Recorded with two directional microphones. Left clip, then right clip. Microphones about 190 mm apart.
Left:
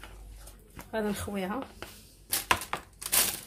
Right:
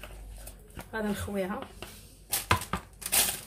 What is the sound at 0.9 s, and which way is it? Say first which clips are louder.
Speech: even; 25° left (ahead or behind).